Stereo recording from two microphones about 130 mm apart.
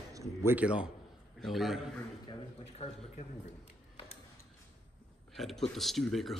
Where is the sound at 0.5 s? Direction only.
10° right (ahead or behind).